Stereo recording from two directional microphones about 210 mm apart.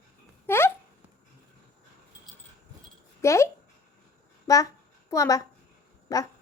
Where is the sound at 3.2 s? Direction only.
15° left (ahead or behind).